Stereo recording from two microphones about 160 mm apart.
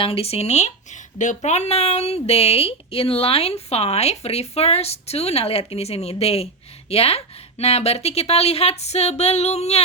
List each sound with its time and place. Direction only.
0.0 s speech: 35° left (ahead or behind)